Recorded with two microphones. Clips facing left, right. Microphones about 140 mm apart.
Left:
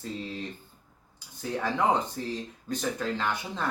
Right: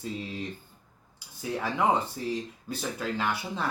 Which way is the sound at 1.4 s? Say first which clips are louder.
Even; 5° right (ahead or behind).